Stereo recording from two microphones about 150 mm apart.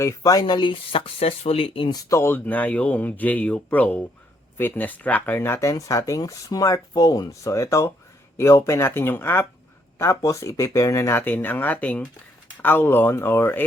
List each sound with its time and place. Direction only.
0.0 s speech: 25° left (ahead or behind)